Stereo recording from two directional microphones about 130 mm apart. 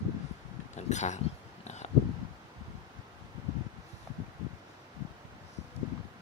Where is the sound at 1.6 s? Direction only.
60° left (ahead or behind).